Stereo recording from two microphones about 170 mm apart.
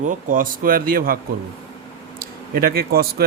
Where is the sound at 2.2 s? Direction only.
60° right (ahead or behind).